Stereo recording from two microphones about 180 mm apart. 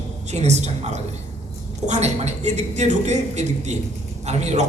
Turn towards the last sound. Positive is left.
turn(degrees=-40)  # may be behind; listen again after turning